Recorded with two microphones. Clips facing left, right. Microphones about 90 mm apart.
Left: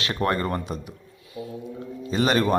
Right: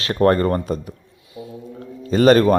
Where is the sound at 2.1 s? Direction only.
45° right (ahead or behind).